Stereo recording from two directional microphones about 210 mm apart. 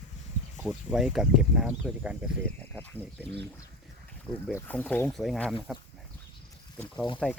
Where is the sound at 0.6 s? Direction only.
5° right (ahead or behind).